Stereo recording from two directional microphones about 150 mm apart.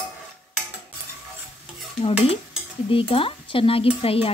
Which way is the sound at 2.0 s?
40° left (ahead or behind).